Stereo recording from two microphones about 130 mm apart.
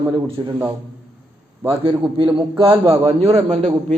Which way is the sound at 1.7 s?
45° right (ahead or behind).